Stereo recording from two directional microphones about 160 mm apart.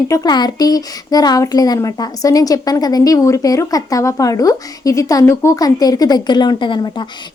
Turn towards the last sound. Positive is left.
turn(degrees=30)  # may be behind; listen again after turning